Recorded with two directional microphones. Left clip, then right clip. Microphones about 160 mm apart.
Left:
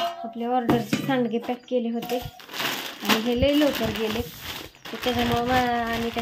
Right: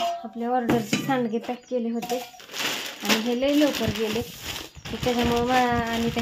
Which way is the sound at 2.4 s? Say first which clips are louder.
Even; 50° left (ahead or behind).